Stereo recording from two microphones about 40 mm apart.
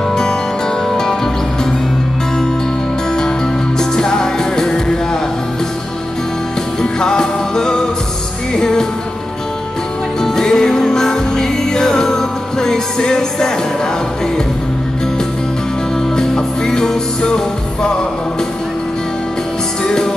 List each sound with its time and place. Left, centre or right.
0.1 s music: centre
3.9 s music: centre
6.8 s music: centre
10.2 s music: centre
16.2 s music: centre
19.8 s music: centre